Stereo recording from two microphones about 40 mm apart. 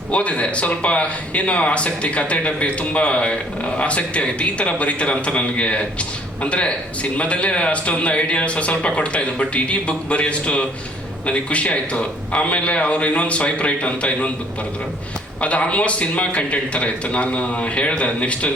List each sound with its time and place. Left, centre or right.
0.1 s a man's voice: left
15.4 s a man's voice: left